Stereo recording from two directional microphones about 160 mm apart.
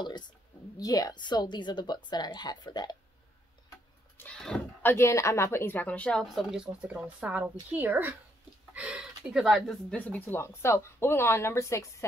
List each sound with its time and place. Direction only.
0.7 s a woman's voice: 25° left (ahead or behind)
4.2 s speech: 10° left (ahead or behind)